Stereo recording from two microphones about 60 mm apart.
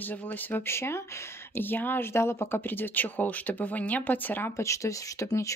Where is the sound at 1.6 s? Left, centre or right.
Left.